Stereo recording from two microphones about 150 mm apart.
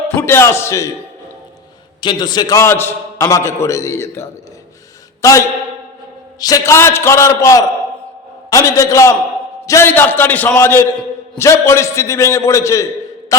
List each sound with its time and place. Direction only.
0.2 s a man's voice: 15° left (ahead or behind)
2.0 s a man's voice: 30° left (ahead or behind)